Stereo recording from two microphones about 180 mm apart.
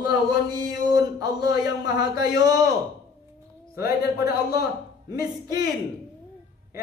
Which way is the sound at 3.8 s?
60° left (ahead or behind).